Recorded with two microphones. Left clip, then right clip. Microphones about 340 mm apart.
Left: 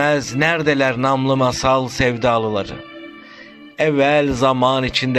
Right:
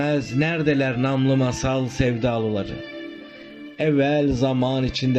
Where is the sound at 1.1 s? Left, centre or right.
Left.